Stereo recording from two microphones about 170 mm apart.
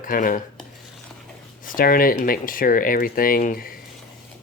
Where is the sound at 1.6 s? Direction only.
55° left (ahead or behind).